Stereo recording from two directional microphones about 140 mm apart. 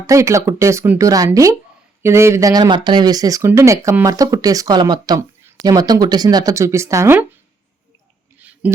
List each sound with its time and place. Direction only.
0.1 s speech: 20° right (ahead or behind)
8.4 s hiccup: 10° right (ahead or behind)